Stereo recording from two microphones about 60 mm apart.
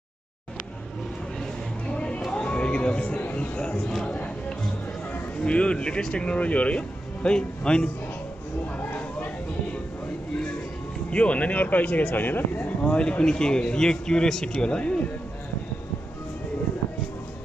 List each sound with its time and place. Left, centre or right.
1.9 s a sound: centre
3.5 s speech: centre
5.4 s speech: centre
8.7 s a sound: left
11.1 s speech: left
12.8 s speech: centre